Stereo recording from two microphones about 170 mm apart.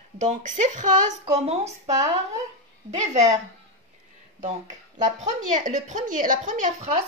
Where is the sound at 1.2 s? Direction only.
35° right (ahead or behind).